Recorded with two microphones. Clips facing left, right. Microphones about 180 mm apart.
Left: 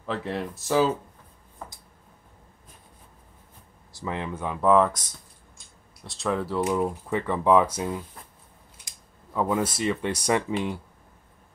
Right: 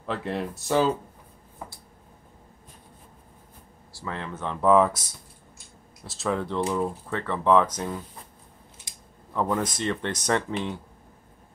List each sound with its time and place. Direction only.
0.0 s speech: centre (ahead or behind)
1.6 s a sound: 15° right (ahead or behind)
3.9 s speech: 15° left (ahead or behind)
4.6 s speech: centre (ahead or behind)
6.0 s speech: centre (ahead or behind)
9.3 s speech: 10° left (ahead or behind)